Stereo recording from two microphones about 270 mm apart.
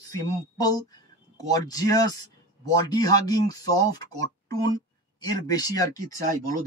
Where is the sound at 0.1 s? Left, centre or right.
Centre.